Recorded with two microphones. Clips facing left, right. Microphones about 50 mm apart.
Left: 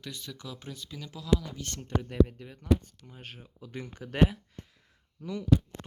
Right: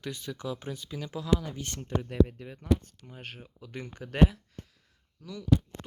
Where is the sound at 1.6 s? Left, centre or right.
Centre.